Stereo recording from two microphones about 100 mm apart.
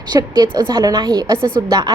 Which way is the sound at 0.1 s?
45° right (ahead or behind).